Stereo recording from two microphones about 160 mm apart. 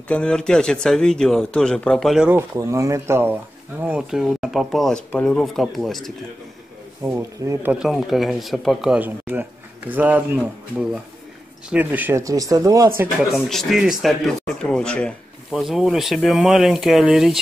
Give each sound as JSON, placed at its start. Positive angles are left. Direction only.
{"t": 0.1, "sound": "speech", "side_deg": 5}
{"t": 2.3, "sound": "speech", "side_deg": -20}
{"t": 7.1, "sound": "speech", "side_deg": -15}
{"t": 7.7, "sound": "speech", "side_deg": -5}
{"t": 13.3, "sound": "speech", "side_deg": 0}